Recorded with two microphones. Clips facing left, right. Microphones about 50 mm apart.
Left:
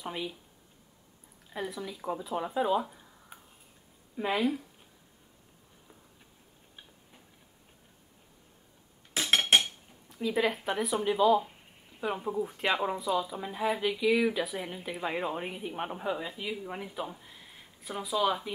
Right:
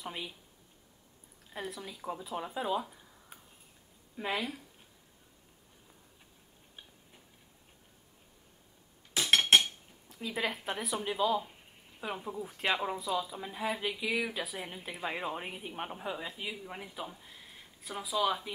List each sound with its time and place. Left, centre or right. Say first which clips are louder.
0.0 s a woman's voice: left 4 dB; centre
1.5 s speech: left 4 dB; centre
10.0 s a woman's voice: left 6 dB; centre
14.0 s speech: left 8 dB; centre
14.3 s a woman's voice: left 5 dB; centre